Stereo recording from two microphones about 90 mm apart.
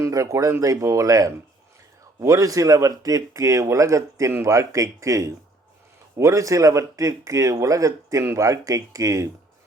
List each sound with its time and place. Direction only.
0.0 s speech: 35° right (ahead or behind)